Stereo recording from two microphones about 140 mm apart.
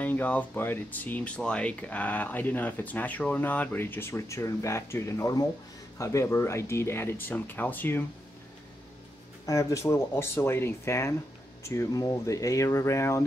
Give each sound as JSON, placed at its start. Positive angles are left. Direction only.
{"t": 0.0, "sound": "speech", "side_deg": 10}
{"t": 9.5, "sound": "speech", "side_deg": 20}